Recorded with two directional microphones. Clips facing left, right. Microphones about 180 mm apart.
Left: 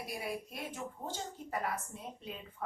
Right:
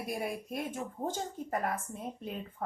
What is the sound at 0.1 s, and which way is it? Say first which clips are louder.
A woman's voice: right 6 dB; 50° right (ahead or behind).